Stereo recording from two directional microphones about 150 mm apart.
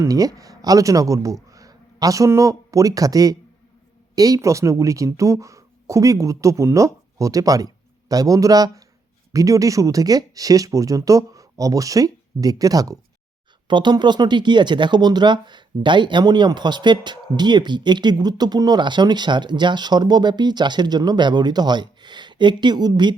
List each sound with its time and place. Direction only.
0.0 s speech: 25° right (ahead or behind)